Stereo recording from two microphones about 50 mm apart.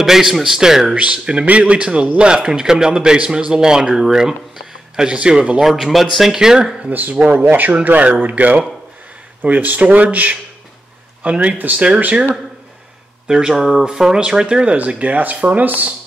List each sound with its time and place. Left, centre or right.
0.0 s a man's voice: centre
0.9 s a man's voice: right
5.6 s speech: centre
6.3 s a man's voice: centre
6.9 s speech: right
13.5 s a man's voice: centre; by 15.6 s right